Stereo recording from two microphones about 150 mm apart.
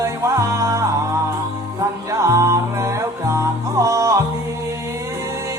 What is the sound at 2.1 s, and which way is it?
Music, 20° right (ahead or behind).